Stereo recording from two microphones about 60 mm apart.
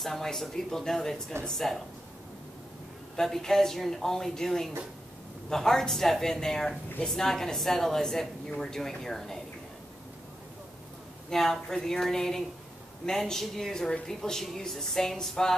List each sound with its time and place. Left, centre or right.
0.0 s speech: centre
3.2 s speech: centre
11.2 s speech: centre